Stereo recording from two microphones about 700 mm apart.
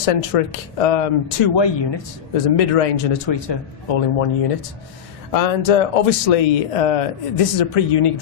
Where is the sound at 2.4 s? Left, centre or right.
Left.